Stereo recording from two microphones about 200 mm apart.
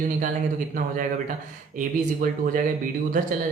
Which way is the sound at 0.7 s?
40° right (ahead or behind).